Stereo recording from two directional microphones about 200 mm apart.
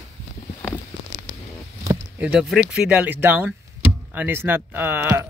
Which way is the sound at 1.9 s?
10° right (ahead or behind).